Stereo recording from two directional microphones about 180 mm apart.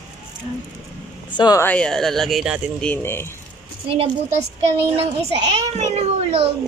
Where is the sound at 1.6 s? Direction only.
5° left (ahead or behind).